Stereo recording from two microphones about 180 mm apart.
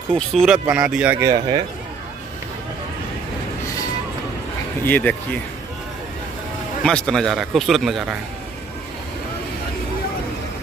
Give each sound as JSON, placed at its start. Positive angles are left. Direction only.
{"t": 0.1, "sound": "a man's voice", "side_deg": 0}
{"t": 1.2, "sound": "speech", "side_deg": -25}
{"t": 4.8, "sound": "speech", "side_deg": 10}
{"t": 6.8, "sound": "a man's voice", "side_deg": 5}